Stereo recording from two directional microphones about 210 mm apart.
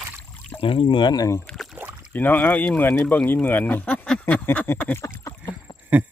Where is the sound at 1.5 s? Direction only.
Centre (ahead or behind).